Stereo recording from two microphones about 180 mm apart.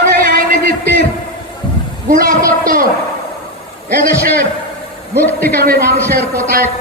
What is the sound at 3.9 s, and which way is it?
Speech, 55° right (ahead or behind).